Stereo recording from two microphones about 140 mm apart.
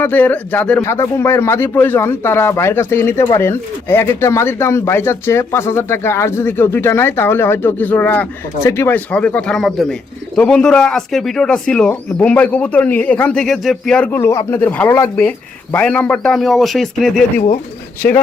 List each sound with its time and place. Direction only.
0.0 s speech: 10° left (ahead or behind)